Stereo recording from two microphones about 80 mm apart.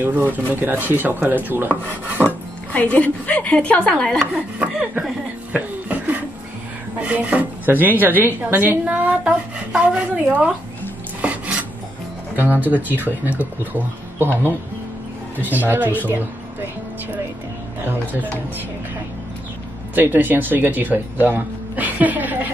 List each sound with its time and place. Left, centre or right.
0.0 s chopping: right
2.7 s speech: centre
4.6 s chopping: centre
5.5 s a sound: centre
7.0 s a woman's voice: centre
8.5 s a sound: right
11.1 s dishes: centre
12.4 s chopping: right
15.4 s chopping: right
20.0 s speech: right